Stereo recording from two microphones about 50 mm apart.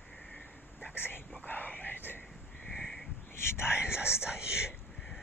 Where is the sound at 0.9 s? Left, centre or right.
Left.